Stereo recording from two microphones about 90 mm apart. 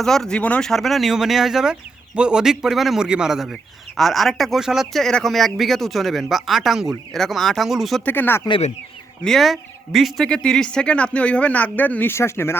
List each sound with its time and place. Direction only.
0.0 s speech: 5° left (ahead or behind)
0.7 s speech: centre (ahead or behind)
8.0 s speech: 20° left (ahead or behind)
9.2 s speech: centre (ahead or behind); by 12.5 s 30° left (ahead or behind)